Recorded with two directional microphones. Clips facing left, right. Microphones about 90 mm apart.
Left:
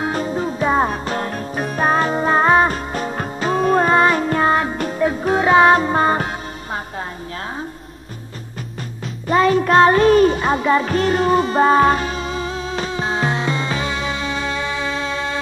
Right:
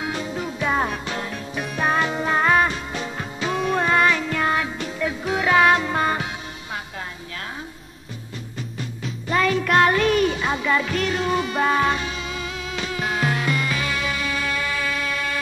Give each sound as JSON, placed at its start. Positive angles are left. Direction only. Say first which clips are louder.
{"t": 0.0, "sound": "music", "louder": "left 6 dB", "side_deg": 40}
{"t": 2.7, "sound": "music", "louder": "left 6 dB", "side_deg": 45}
{"t": 9.3, "sound": "music", "louder": "left 6 dB", "side_deg": 35}